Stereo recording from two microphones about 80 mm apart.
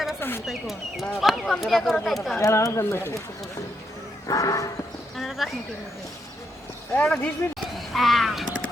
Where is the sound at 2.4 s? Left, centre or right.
Left.